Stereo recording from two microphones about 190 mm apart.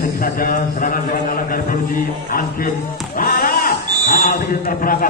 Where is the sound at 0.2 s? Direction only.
45° left (ahead or behind).